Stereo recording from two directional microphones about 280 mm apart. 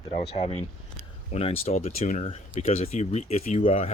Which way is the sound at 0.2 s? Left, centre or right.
Centre.